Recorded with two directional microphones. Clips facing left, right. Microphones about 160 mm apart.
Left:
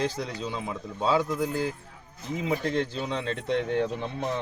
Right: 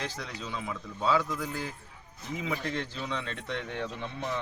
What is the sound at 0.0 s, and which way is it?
Speech, 30° left (ahead or behind).